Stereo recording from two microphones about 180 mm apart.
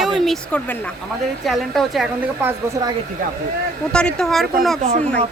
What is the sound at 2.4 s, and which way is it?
Speech, 20° right (ahead or behind).